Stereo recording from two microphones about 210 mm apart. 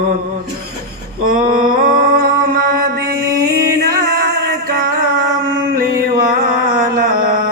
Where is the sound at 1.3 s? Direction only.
40° right (ahead or behind).